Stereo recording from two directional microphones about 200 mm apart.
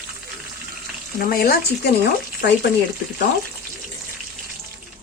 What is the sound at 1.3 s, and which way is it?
Speech, 50° left (ahead or behind).